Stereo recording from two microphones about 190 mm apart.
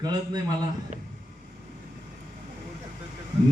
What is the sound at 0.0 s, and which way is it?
Speech, 20° right (ahead or behind).